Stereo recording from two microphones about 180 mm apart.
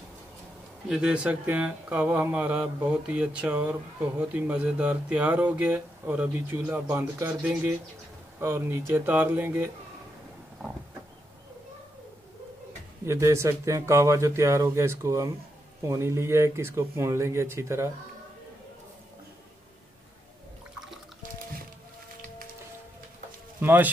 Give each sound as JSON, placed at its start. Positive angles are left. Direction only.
{"t": 0.8, "sound": "speech", "side_deg": -5}
{"t": 13.0, "sound": "speech", "side_deg": -15}
{"t": 23.6, "sound": "speech", "side_deg": -10}